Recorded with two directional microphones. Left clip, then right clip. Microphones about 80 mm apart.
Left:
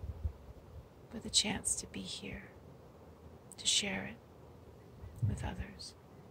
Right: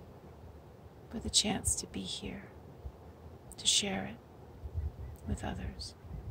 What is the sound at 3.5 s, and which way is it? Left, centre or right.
Speech, right.